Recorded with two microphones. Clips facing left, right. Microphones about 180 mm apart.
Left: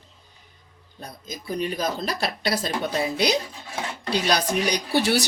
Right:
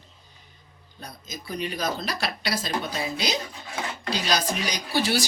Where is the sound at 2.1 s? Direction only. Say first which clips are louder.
Left 3 dB; 50° left (ahead or behind).